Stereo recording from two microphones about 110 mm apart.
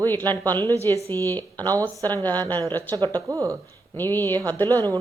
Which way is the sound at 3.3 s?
25° right (ahead or behind).